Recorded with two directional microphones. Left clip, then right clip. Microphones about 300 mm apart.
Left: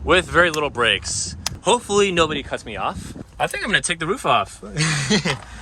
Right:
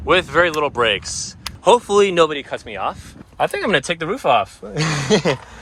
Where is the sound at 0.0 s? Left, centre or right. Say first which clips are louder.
Right 1 dB; centre.